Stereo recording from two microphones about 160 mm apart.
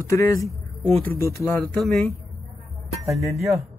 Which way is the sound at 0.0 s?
20° left (ahead or behind).